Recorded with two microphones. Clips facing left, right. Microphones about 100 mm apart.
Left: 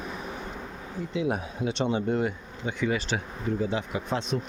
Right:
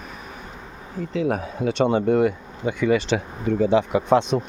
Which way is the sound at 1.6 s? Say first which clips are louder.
Right 8 dB; 55° right (ahead or behind).